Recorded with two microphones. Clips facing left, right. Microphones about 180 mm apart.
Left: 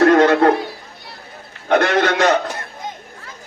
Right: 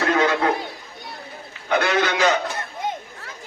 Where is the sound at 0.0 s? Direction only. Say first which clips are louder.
Left 8 dB; 55° left (ahead or behind).